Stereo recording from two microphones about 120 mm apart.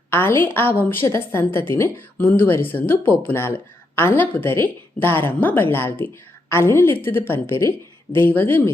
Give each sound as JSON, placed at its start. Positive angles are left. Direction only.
{"t": 0.1, "sound": "a woman's voice", "side_deg": 20}